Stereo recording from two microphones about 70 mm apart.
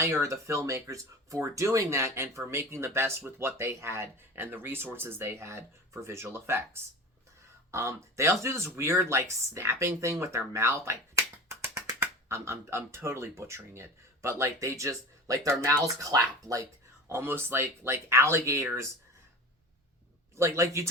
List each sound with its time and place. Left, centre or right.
0.0 s speech: right
7.7 s speech: right
16.0 s speech: right
17.1 s speech: right
20.3 s speech: right